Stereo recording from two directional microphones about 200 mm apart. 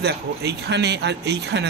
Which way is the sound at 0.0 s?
55° right (ahead or behind).